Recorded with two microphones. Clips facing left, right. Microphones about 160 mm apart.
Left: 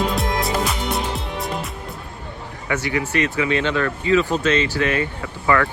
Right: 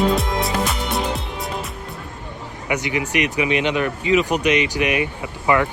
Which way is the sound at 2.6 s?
15° right (ahead or behind).